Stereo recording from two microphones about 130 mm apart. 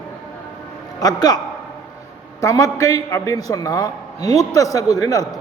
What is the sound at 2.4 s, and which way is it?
A man's voice, 25° left (ahead or behind).